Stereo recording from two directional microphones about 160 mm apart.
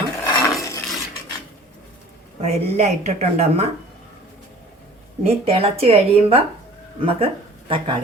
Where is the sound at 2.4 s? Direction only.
40° right (ahead or behind).